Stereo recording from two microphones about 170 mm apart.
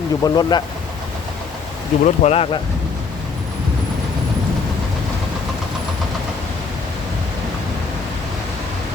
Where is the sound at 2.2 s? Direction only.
35° left (ahead or behind).